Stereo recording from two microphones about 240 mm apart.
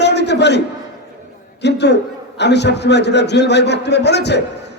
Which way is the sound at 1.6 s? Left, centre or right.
Left.